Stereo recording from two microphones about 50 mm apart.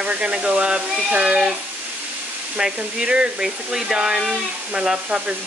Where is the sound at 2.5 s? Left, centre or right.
Centre.